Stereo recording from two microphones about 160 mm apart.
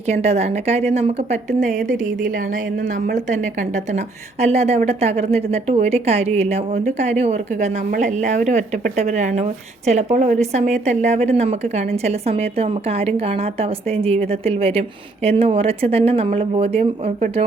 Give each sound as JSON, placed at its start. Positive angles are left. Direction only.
{"t": 0.1, "sound": "a woman's voice", "side_deg": -40}